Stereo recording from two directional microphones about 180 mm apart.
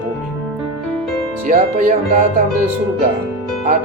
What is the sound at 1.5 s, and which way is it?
Speech, 45° right (ahead or behind).